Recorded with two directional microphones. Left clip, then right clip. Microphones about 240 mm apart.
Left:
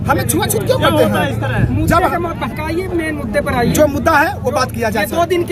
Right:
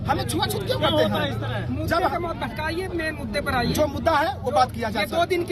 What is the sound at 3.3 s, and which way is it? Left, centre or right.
Speech, centre.